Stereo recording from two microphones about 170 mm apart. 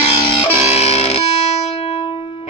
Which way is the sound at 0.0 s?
35° left (ahead or behind).